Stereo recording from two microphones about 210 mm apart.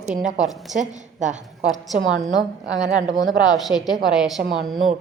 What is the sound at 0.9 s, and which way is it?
Speech, 35° right (ahead or behind).